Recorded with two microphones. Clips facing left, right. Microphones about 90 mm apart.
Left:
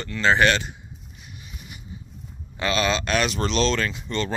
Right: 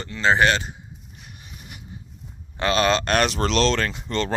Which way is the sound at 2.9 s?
55° right (ahead or behind).